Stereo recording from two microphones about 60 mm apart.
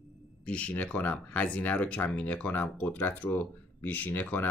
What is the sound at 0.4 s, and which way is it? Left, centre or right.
Speech, centre.